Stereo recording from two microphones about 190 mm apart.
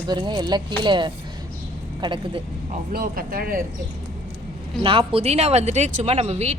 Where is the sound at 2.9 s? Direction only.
50° right (ahead or behind).